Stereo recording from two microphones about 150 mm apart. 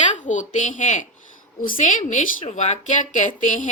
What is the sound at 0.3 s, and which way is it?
A woman's voice, 55° left (ahead or behind).